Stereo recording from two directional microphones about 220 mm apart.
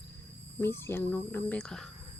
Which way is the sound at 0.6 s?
10° left (ahead or behind).